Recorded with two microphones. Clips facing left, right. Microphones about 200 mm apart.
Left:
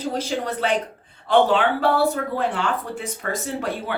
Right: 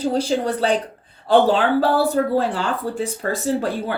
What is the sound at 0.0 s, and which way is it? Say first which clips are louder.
A woman's voice: right 5 dB; 30° right (ahead or behind).